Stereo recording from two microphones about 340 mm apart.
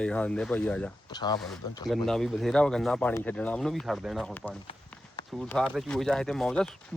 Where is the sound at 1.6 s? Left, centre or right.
Centre.